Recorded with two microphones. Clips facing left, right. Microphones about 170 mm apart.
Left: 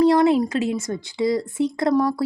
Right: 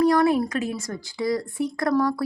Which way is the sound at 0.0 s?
25° left (ahead or behind).